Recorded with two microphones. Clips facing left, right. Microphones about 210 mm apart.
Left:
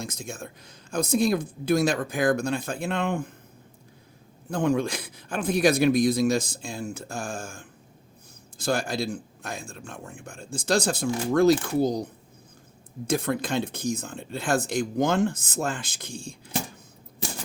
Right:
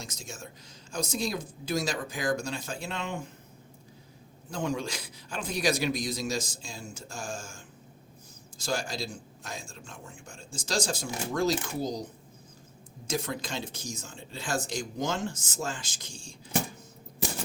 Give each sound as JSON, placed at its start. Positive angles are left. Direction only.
{"t": 0.0, "sound": "speech", "side_deg": 55}
{"t": 4.5, "sound": "speech", "side_deg": 55}
{"t": 13.1, "sound": "speech", "side_deg": 55}